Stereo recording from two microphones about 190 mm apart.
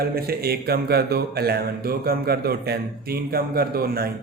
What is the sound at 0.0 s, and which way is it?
Speech, 55° right (ahead or behind).